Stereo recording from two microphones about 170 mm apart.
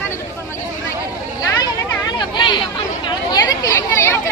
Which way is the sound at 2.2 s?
25° left (ahead or behind).